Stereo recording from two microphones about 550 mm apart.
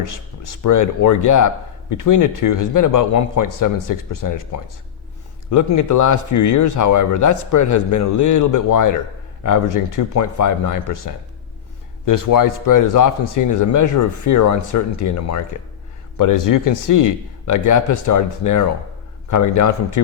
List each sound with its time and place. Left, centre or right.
0.1 s speech: left
5.5 s speech: left